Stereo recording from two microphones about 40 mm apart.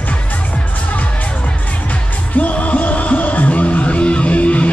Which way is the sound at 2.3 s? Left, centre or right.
Left.